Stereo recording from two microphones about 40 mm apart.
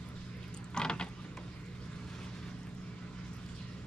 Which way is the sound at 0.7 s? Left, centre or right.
Left.